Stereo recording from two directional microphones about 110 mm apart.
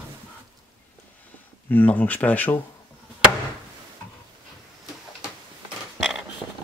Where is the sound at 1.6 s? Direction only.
15° left (ahead or behind).